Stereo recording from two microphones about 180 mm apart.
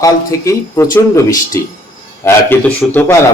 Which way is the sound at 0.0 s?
20° left (ahead or behind).